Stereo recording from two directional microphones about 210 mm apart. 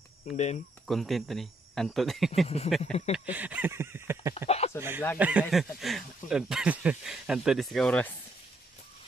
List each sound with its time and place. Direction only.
0.8 s speech: centre (ahead or behind)
2.4 s speech: 30° left (ahead or behind)
3.3 s a sound: 5° right (ahead or behind)
4.5 s speech: 30° left (ahead or behind)
4.7 s a sound: 10° right (ahead or behind)
5.2 s speech: 5° right (ahead or behind)